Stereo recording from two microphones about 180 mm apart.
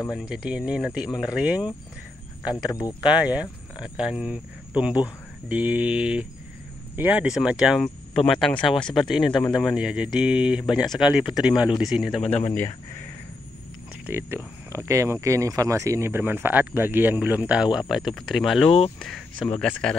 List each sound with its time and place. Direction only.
0.1 s speech: 5° right (ahead or behind)
2.4 s speech: 20° left (ahead or behind)
3.0 s speech: 5° right (ahead or behind)
14.0 s speech: 15° right (ahead or behind); by 20.0 s 5° left (ahead or behind)